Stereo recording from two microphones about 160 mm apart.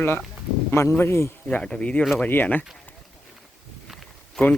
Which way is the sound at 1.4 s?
5° left (ahead or behind).